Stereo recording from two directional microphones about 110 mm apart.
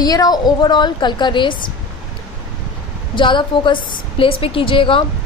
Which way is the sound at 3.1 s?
45° left (ahead or behind).